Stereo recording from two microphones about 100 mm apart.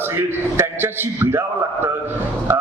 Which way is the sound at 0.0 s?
25° right (ahead or behind).